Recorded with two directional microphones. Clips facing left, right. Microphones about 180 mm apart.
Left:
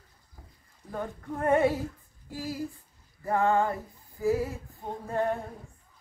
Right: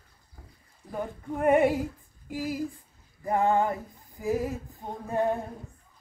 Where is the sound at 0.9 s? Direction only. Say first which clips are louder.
Right 2 dB; 15° right (ahead or behind).